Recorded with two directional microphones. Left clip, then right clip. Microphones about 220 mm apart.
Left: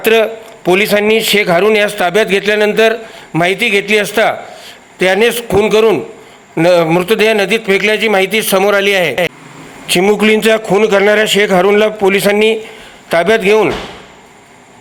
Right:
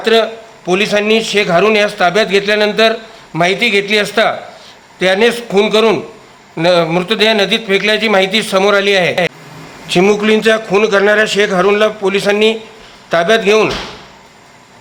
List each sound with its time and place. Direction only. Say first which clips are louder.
0.0 s a man's voice: left 1 dB; 25° left (ahead or behind)